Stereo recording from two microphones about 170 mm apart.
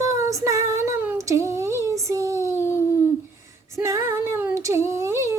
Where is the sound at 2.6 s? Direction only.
15° left (ahead or behind).